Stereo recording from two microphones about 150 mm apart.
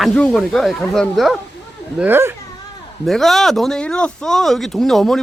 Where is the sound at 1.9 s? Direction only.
15° right (ahead or behind).